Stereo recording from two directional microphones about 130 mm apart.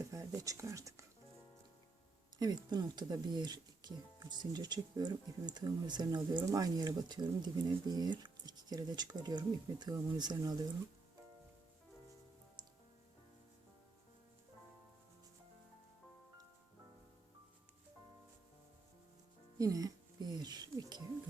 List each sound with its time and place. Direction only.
0.0 s speech: 25° right (ahead or behind)
2.4 s speech: 35° right (ahead or behind)
19.5 s music: 25° right (ahead or behind)